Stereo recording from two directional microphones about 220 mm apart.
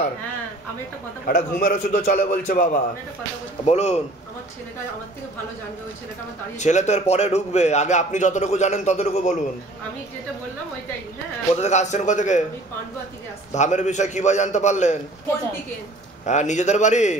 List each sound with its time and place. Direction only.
1.2 s a man's voice: 40° left (ahead or behind)
6.6 s a man's voice: 30° left (ahead or behind)
11.5 s a man's voice: 30° left (ahead or behind)
13.5 s a man's voice: 35° left (ahead or behind)
16.3 s a man's voice: 30° left (ahead or behind)